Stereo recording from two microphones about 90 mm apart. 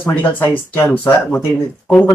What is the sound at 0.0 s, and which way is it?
Speech, 20° left (ahead or behind).